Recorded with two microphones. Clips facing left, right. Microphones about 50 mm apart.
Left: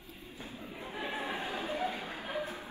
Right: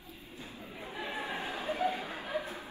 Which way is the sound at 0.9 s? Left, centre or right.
Left.